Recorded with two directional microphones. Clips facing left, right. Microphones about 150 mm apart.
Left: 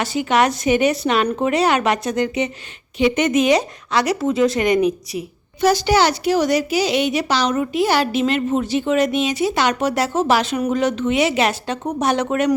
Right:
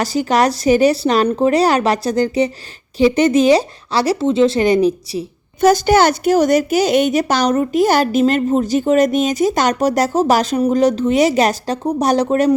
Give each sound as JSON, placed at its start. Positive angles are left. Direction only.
{"t": 0.0, "sound": "speech", "side_deg": -40}
{"t": 5.5, "sound": "a woman's voice", "side_deg": -50}